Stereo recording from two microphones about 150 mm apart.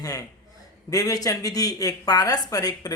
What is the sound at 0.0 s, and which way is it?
Speech, 25° left (ahead or behind).